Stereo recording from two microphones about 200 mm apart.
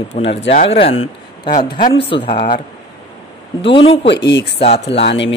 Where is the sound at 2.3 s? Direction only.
50° left (ahead or behind).